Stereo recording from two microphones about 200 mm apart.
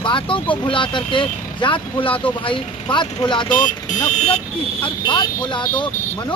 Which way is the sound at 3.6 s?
40° left (ahead or behind).